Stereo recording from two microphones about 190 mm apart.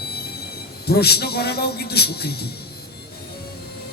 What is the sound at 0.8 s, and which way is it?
A man's voice, 55° left (ahead or behind).